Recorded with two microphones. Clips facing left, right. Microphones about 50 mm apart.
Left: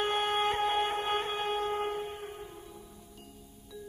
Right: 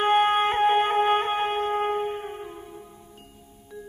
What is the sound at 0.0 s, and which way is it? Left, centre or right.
Music, right.